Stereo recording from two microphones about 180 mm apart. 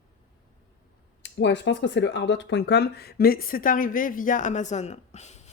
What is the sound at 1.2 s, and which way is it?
Speech, 85° left.